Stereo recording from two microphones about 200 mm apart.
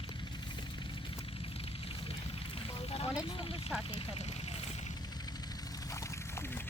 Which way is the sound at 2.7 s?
30° left (ahead or behind).